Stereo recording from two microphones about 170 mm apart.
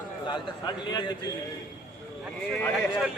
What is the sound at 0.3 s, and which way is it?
Speech, 25° left (ahead or behind).